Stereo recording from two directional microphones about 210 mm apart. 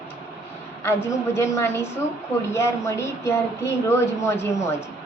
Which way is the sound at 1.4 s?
10° left (ahead or behind).